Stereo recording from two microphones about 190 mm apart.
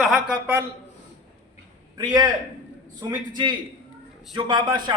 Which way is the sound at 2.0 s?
20° right (ahead or behind).